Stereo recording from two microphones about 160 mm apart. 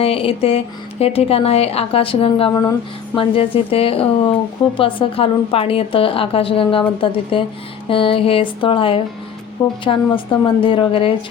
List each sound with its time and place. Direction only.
0.0 s a woman's voice: 35° left (ahead or behind)